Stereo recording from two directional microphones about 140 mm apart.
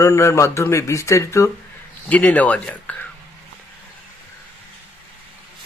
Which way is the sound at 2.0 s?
10° left (ahead or behind).